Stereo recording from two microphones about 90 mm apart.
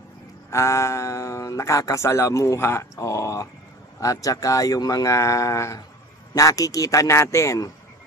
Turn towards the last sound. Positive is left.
turn(degrees=35)  # may be behind; listen again after turning